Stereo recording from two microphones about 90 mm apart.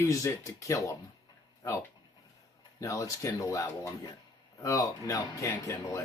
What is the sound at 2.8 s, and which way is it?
Speech, 40° left (ahead or behind).